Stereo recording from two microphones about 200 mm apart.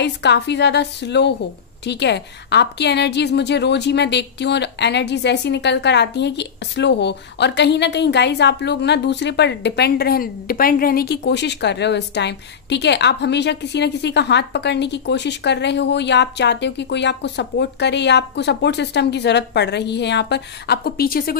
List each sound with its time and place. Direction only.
0.0 s a woman's voice: 60° left (ahead or behind)